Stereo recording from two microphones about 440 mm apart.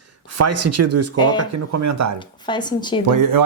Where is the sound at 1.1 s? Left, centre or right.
Centre.